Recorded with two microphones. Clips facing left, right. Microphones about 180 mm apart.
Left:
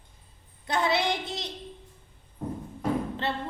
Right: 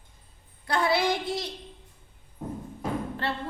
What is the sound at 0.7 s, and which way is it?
Speech, 20° left (ahead or behind).